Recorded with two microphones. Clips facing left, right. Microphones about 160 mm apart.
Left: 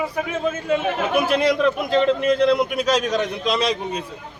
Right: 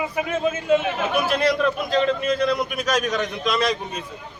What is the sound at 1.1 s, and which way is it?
A man's voice, 15° left (ahead or behind).